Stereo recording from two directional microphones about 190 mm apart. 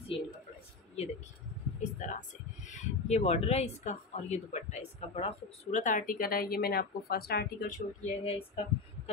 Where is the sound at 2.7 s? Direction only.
35° left (ahead or behind).